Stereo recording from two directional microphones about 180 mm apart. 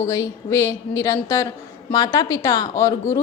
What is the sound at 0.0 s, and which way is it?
A woman's voice, 15° left (ahead or behind).